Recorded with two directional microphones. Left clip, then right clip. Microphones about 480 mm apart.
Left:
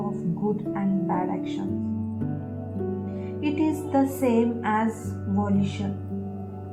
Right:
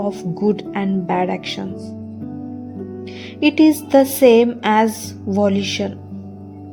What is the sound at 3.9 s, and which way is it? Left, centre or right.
Speech, right.